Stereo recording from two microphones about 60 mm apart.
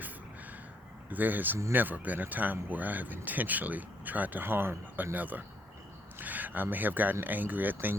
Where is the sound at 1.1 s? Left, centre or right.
Right.